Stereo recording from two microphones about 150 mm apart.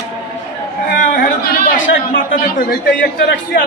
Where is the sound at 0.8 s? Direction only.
70° left (ahead or behind).